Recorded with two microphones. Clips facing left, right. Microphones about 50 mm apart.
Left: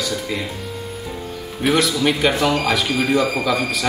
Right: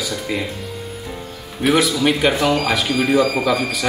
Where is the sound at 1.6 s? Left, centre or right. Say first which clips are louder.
Right 2 dB; centre.